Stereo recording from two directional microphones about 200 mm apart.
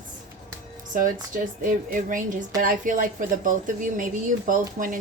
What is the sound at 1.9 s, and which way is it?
A woman's voice, 40° right (ahead or behind).